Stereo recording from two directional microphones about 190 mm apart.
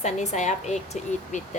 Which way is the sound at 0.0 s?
40° left (ahead or behind).